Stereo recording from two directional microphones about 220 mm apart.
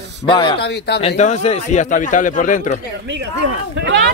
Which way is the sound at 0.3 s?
20° left (ahead or behind).